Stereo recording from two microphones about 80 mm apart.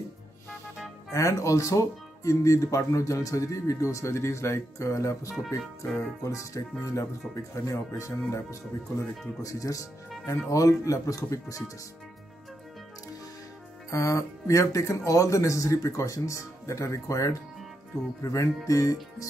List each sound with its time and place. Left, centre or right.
1.1 s speech: left
13.8 s speech: left